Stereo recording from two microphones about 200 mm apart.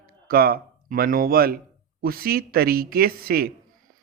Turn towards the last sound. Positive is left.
turn(degrees=-50)  # may be behind; listen again after turning